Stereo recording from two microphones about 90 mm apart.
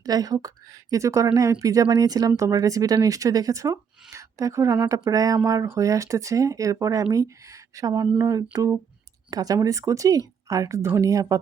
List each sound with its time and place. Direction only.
0.0 s speech: 45° right (ahead or behind)